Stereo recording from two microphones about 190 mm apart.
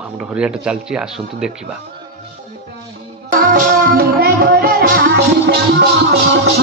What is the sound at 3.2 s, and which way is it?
Music, 45° right (ahead or behind).